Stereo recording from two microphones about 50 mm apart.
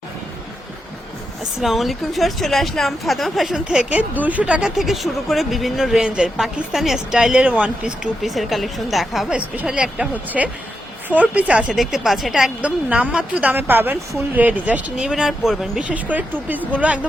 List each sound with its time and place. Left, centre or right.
1.6 s speech: centre
3.6 s speech: right
3.9 s speech: right
4.6 s speech: centre
6.0 s speech: centre
8.2 s speech: centre
9.6 s speech: centre
11.7 s speech: centre
12.6 s speech: right; by 15.8 s centre
15.9 s speech: right